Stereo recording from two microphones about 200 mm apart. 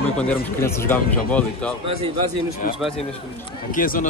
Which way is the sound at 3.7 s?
45° left (ahead or behind).